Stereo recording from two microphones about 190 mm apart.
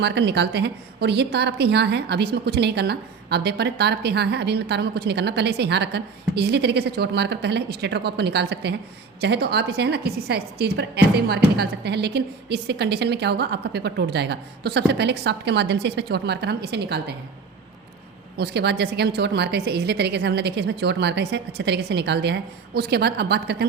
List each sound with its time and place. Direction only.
0.0 s a woman's voice: 65° right (ahead or behind)
18.3 s a woman's voice: 60° right (ahead or behind)